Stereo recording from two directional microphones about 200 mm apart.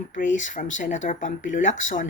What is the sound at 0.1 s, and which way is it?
Speech, 40° left (ahead or behind).